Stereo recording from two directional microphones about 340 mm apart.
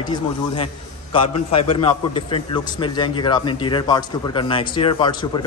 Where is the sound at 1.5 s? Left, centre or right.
Centre.